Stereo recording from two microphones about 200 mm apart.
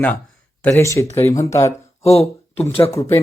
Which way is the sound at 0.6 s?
15° left (ahead or behind).